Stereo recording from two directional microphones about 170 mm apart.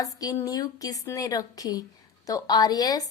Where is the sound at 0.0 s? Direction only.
20° left (ahead or behind).